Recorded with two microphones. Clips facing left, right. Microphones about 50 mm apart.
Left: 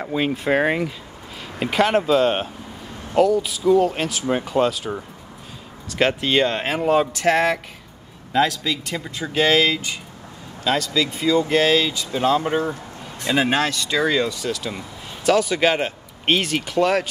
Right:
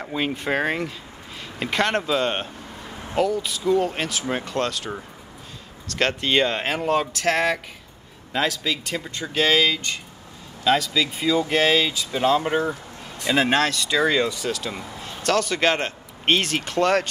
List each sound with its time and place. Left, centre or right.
0.0 s speech: centre